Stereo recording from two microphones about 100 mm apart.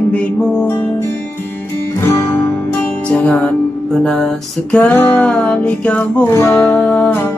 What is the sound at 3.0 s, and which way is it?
Music, 15° left (ahead or behind).